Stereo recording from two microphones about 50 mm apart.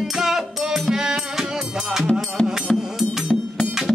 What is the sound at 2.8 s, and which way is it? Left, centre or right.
Music, centre.